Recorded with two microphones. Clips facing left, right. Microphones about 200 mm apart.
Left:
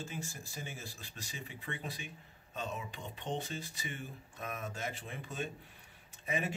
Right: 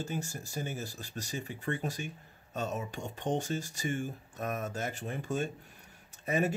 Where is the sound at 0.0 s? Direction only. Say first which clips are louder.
Right 6 dB; 45° right (ahead or behind).